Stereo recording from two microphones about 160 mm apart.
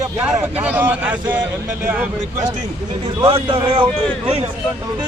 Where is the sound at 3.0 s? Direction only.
35° right (ahead or behind).